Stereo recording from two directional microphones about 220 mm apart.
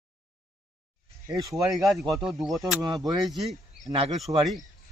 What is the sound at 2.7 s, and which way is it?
Speech, 15° right (ahead or behind).